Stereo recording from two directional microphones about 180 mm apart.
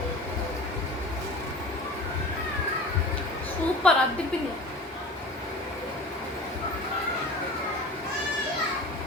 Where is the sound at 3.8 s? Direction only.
5° left (ahead or behind).